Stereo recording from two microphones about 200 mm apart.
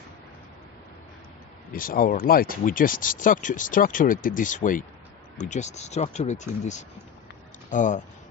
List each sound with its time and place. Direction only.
1.7 s speech: 45° left (ahead or behind)